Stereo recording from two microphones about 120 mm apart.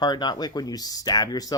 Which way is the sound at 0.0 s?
35° left (ahead or behind).